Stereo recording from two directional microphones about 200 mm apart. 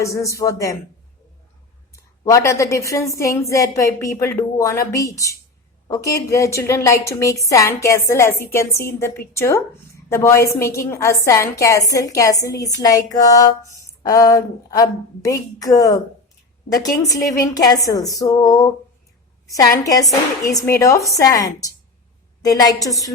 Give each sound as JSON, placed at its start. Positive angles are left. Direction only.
{"t": 0.0, "sound": "a woman's voice", "side_deg": 15}
{"t": 1.9, "sound": "a woman's voice", "side_deg": 15}